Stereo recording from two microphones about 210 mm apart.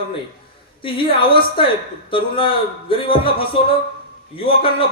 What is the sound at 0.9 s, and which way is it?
A man's voice, 25° left (ahead or behind).